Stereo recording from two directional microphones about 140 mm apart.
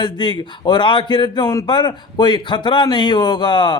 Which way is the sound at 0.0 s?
30° left (ahead or behind).